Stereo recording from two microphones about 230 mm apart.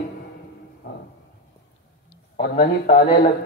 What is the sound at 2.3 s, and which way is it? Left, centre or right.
Speech, left.